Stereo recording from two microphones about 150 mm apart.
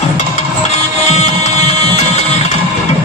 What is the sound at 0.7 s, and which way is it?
Music, 45° left (ahead or behind).